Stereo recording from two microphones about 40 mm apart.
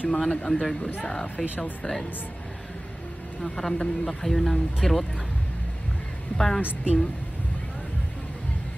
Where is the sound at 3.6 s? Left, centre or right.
Centre.